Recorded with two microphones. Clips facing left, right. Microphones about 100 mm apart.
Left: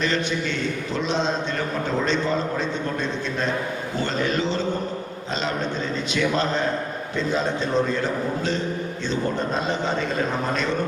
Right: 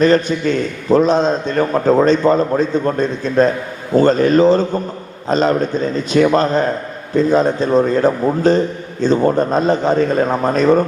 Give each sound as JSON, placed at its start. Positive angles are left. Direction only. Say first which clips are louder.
{"t": 0.0, "sound": "a man's voice", "louder": "right 11 dB", "side_deg": -45}